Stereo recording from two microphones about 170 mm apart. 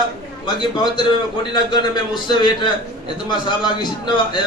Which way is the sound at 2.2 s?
25° left (ahead or behind).